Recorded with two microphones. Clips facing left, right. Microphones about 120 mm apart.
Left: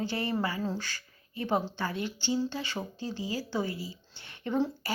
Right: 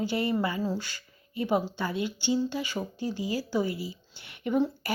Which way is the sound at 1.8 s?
15° right (ahead or behind).